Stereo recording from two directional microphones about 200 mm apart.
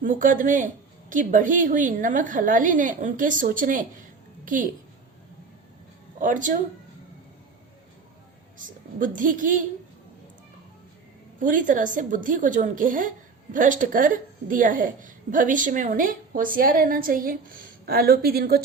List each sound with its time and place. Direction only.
0.0 s a woman's voice: 40° right (ahead or behind)
6.1 s a woman's voice: 40° right (ahead or behind)
8.5 s a woman's voice: 40° right (ahead or behind)
11.3 s a woman's voice: 40° right (ahead or behind)